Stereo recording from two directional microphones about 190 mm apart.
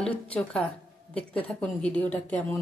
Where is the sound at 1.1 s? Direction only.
5° left (ahead or behind).